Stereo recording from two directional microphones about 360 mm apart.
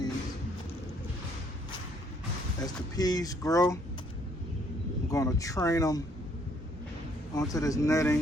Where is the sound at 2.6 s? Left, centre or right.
Centre.